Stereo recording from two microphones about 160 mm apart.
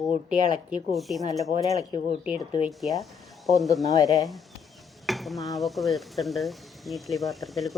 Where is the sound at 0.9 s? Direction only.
Centre (ahead or behind).